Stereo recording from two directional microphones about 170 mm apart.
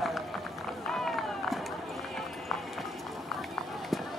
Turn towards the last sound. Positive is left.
turn(degrees=0)  # may be behind; listen again after turning